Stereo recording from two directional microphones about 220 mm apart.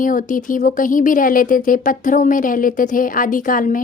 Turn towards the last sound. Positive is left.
turn(degrees=40)  # may be behind; listen again after turning